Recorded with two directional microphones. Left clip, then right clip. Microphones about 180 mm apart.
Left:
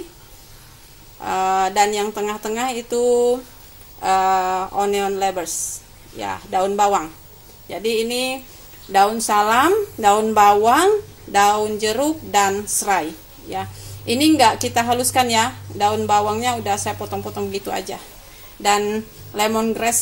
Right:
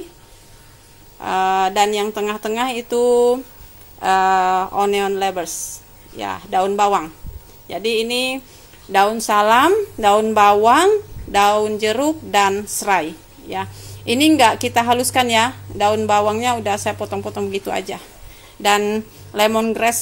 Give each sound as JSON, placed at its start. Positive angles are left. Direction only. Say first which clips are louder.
{"t": 1.2, "sound": "a woman's voice", "louder": "right 2 dB", "side_deg": -15}